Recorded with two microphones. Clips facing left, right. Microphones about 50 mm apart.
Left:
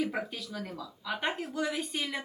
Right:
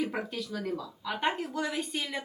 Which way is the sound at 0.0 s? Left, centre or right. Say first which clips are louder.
Even; centre.